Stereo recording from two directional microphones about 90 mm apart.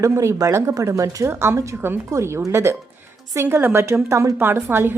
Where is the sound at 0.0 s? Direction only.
35° right (ahead or behind).